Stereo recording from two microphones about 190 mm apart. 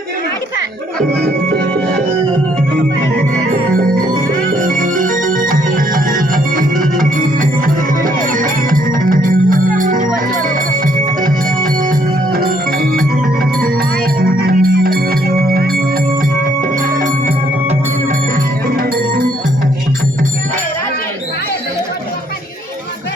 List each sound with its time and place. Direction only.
4.6 s music: 45° right (ahead or behind)
14.3 s music: 50° right (ahead or behind)